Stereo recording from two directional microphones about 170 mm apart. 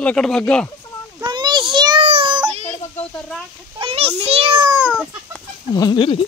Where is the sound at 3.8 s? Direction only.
35° right (ahead or behind).